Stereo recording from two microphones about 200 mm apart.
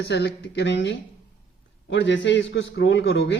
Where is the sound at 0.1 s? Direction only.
60° left (ahead or behind).